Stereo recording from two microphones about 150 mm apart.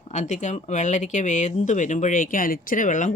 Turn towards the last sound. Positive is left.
turn(degrees=55)  # may be behind; listen again after turning